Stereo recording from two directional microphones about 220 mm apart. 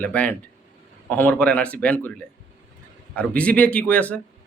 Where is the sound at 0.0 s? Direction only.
5° left (ahead or behind).